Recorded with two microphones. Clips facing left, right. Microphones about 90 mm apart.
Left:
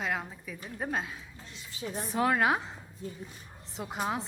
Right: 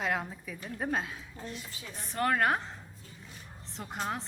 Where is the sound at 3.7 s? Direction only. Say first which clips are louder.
Left 3 dB; 5° left (ahead or behind).